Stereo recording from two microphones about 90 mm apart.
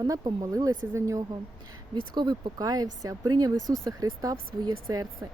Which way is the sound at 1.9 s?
55° right (ahead or behind).